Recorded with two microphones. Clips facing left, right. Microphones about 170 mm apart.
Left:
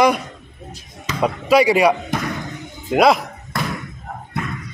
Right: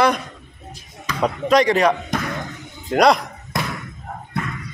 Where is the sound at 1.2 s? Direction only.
5° left (ahead or behind).